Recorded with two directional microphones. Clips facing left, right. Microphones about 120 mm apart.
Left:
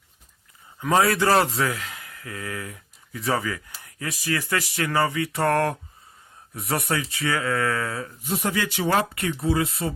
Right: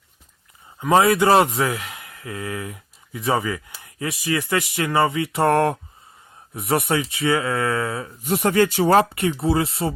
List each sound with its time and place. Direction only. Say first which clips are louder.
0.8 s a man's voice: right 4 dB; 15° right (ahead or behind)
8.2 s speech: right 8 dB; 60° right (ahead or behind); by 9.0 s 40° right (ahead or behind)
9.1 s speech: right 3 dB; 25° right (ahead or behind)